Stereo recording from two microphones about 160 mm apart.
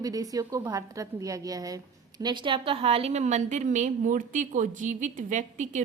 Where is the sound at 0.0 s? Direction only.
20° right (ahead or behind).